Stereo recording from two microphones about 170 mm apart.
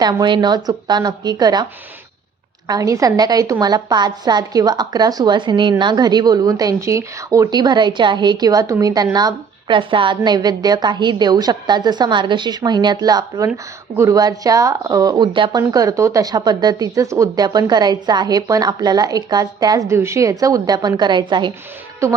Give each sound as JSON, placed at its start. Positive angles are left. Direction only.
{"t": 0.0, "sound": "speech", "side_deg": -25}
{"t": 2.6, "sound": "speech", "side_deg": -20}